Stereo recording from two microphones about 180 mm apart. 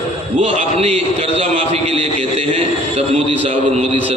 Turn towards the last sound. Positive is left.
turn(degrees=-30)  # may be behind; listen again after turning